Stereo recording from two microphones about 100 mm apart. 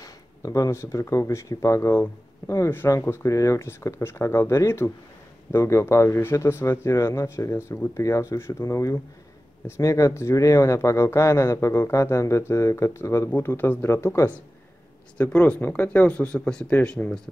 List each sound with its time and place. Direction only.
0.0 s speech: 35° left (ahead or behind)
15.1 s speech: 15° left (ahead or behind)